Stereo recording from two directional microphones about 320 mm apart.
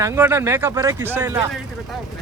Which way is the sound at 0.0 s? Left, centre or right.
Centre.